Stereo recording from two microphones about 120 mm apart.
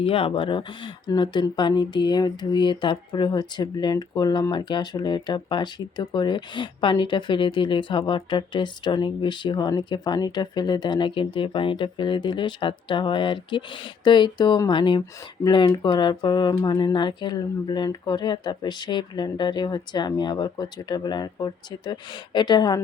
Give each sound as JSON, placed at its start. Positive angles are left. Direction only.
{"t": 0.0, "sound": "speech", "side_deg": 50}